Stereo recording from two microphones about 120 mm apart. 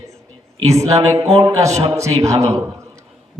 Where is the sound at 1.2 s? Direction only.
55° right (ahead or behind).